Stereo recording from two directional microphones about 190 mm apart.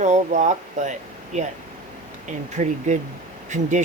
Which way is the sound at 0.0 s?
40° right (ahead or behind).